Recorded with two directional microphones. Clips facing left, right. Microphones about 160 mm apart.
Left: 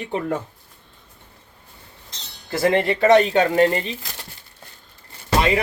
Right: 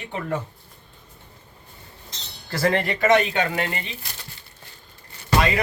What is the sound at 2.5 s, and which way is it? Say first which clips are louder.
Speech: left 4 dB; 20° left (ahead or behind).